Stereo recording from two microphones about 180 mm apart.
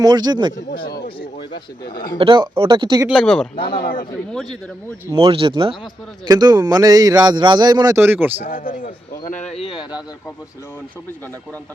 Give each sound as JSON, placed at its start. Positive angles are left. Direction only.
{"t": 0.0, "sound": "a man's voice", "side_deg": -25}
{"t": 0.5, "sound": "speech", "side_deg": 25}
{"t": 0.9, "sound": "speech", "side_deg": 60}
{"t": 2.1, "sound": "a man's voice", "side_deg": -25}
{"t": 3.1, "sound": "speech", "side_deg": 0}
{"t": 3.8, "sound": "speech", "side_deg": 55}
{"t": 5.1, "sound": "a man's voice", "side_deg": -30}
{"t": 8.4, "sound": "speech", "side_deg": 50}